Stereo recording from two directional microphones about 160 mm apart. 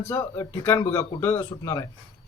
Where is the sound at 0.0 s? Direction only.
15° left (ahead or behind).